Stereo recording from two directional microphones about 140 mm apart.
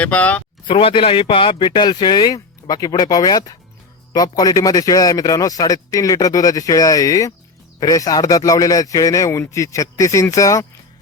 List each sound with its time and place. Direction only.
0.0 s speech: 10° left (ahead or behind)
0.7 s a man's voice: 40° left (ahead or behind); by 10.7 s 25° left (ahead or behind)